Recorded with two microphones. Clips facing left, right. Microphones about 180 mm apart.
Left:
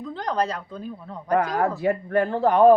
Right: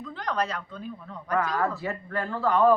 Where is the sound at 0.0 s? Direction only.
35° left (ahead or behind).